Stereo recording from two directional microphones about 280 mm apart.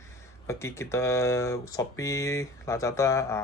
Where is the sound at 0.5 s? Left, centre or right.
Centre.